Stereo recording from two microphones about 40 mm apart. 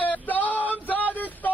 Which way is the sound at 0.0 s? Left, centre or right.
Left.